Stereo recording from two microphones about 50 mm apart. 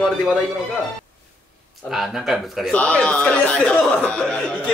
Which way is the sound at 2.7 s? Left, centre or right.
Left.